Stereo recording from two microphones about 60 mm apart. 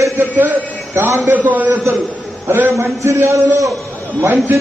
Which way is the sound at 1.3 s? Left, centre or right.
Right.